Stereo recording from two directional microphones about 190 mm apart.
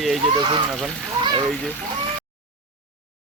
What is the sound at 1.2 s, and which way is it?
Splash, 25° right (ahead or behind).